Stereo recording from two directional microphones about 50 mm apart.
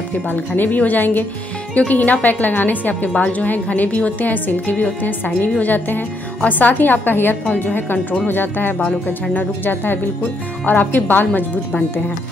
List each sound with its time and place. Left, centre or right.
0.3 s a woman's voice: left